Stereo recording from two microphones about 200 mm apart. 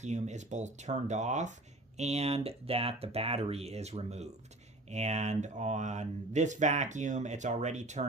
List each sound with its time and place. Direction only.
0.0 s speech: 35° right (ahead or behind)